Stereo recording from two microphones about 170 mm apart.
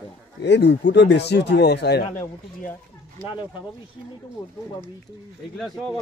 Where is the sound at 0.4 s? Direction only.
80° left.